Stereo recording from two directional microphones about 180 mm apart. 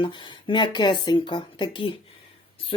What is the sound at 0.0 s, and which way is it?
Speech, 25° left (ahead or behind).